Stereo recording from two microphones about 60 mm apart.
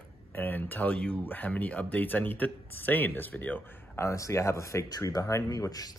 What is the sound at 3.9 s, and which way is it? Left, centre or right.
Speech, left.